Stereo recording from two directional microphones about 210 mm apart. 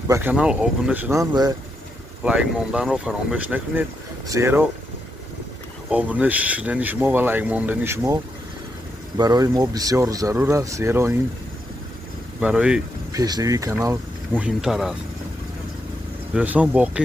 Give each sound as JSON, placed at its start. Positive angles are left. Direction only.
{"t": 0.1, "sound": "speech", "side_deg": -10}
{"t": 2.2, "sound": "speech", "side_deg": -5}
{"t": 5.9, "sound": "speech", "side_deg": -5}
{"t": 12.4, "sound": "speech", "side_deg": -5}
{"t": 13.1, "sound": "speech", "side_deg": -15}
{"t": 16.3, "sound": "speech", "side_deg": -5}